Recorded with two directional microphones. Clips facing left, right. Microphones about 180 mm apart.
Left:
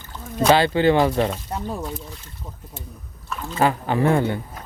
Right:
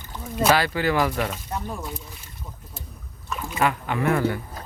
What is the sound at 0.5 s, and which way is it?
Speech, 25° left (ahead or behind).